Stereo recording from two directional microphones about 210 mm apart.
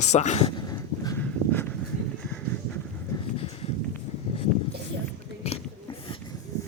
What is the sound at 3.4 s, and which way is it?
Walk, 30° left (ahead or behind).